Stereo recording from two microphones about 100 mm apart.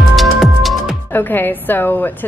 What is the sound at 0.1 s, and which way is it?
Music, centre (ahead or behind).